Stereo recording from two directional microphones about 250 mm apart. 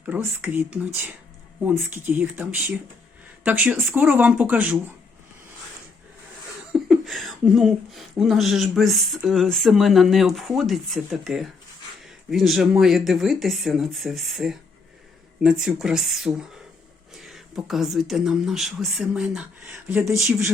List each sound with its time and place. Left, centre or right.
0.0 s speech: centre
6.7 s speech: centre